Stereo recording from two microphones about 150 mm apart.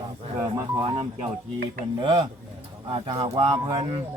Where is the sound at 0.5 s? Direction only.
25° right (ahead or behind).